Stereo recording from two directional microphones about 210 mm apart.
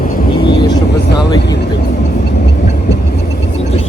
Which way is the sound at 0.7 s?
50° left (ahead or behind).